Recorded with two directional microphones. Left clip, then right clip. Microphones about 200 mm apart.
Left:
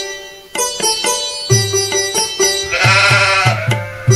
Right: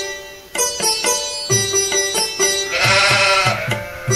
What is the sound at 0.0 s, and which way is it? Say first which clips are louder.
Sitar: left 2 dB; 5° right (ahead or behind).